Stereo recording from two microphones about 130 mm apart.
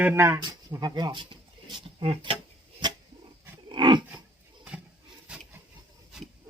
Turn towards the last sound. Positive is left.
turn(degrees=-10)  # may be behind; listen again after turning